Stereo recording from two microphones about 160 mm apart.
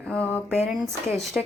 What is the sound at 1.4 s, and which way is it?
Speech, 5° right (ahead or behind).